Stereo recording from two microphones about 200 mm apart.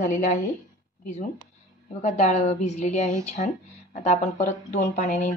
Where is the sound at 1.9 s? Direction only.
35° left (ahead or behind).